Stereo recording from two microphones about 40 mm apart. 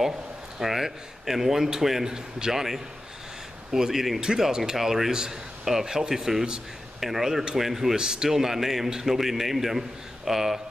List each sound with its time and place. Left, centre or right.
0.6 s a man's voice: centre